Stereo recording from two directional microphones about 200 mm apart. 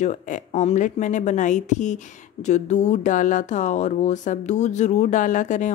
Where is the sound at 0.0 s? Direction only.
40° left (ahead or behind).